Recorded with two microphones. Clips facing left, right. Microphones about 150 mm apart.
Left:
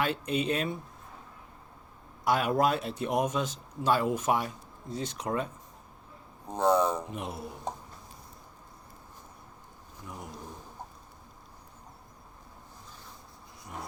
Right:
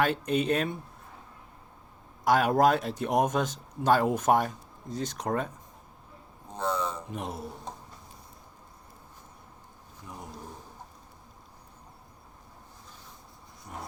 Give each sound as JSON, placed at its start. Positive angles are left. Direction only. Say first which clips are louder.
{"t": 0.0, "sound": "speech", "louder": "right 3 dB", "side_deg": -50}
{"t": 2.2, "sound": "speech", "louder": "right 4 dB", "side_deg": -50}
{"t": 6.5, "sound": "speech", "louder": "left 6 dB", "side_deg": 50}
{"t": 7.2, "sound": "speech", "louder": "right 1 dB", "side_deg": -45}